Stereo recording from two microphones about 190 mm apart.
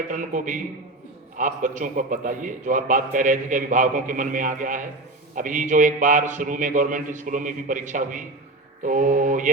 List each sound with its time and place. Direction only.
0.1 s a man's voice: 40° right (ahead or behind)